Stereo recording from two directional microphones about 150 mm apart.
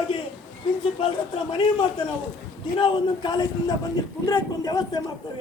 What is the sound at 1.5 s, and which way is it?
A woman's voice, 35° left (ahead or behind).